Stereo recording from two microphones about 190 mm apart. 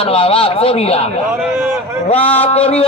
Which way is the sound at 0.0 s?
30° left (ahead or behind).